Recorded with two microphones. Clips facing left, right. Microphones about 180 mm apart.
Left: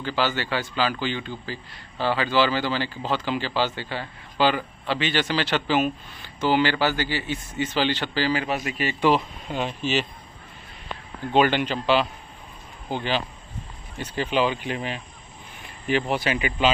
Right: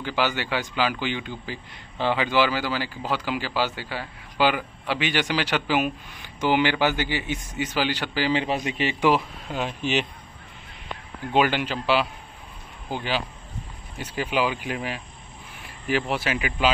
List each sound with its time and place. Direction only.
0.0 s speech: 15° right (ahead or behind)
9.8 s speech: 15° right (ahead or behind)
11.3 s speech: 5° right (ahead or behind)